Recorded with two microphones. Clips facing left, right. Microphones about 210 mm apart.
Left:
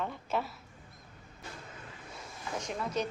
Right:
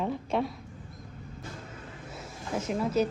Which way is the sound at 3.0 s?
5° right (ahead or behind).